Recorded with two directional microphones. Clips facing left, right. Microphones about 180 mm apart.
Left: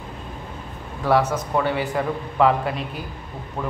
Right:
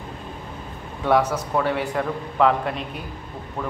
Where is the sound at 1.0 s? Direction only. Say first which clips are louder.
Even; centre (ahead or behind).